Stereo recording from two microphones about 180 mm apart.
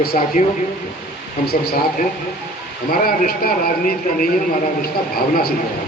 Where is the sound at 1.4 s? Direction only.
60° left (ahead or behind).